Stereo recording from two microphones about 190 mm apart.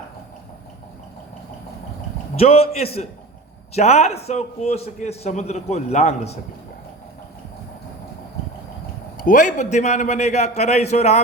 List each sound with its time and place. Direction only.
2.3 s a man's voice: 30° left (ahead or behind)
9.1 s a man's voice: 45° left (ahead or behind)